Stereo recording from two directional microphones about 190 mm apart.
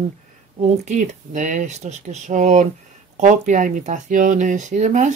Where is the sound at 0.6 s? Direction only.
40° right (ahead or behind).